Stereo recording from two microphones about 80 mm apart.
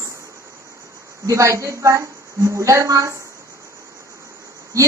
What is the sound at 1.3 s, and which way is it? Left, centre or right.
A woman's voice, right.